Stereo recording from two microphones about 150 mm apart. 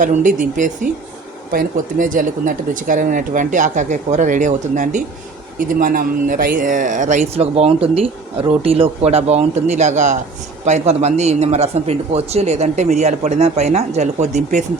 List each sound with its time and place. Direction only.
0.0 s a man's voice: 60° right (ahead or behind)